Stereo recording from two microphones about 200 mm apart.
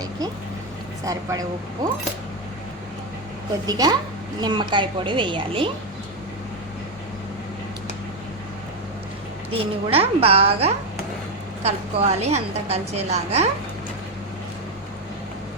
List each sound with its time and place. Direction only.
1.0 s a woman's voice: 15° right (ahead or behind)
3.7 s a woman's voice: 20° right (ahead or behind)
9.5 s a woman's voice: 30° right (ahead or behind)